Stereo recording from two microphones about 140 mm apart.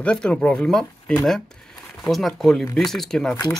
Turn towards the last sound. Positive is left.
turn(degrees=5)  # may be behind; listen again after turning